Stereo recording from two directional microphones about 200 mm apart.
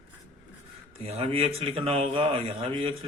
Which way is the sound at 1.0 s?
30° right (ahead or behind).